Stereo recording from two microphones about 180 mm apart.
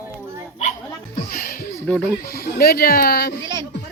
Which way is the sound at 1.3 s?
55° left (ahead or behind).